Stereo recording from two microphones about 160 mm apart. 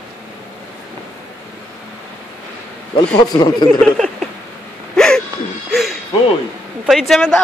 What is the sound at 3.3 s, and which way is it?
Speech, 25° left (ahead or behind).